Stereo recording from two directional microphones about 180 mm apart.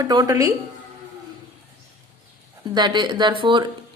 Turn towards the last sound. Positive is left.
turn(degrees=-25)  # may be behind; listen again after turning